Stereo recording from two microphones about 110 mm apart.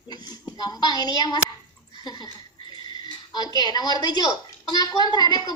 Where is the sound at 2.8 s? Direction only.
40° left (ahead or behind).